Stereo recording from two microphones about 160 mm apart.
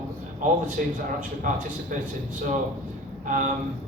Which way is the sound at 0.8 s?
60° right (ahead or behind).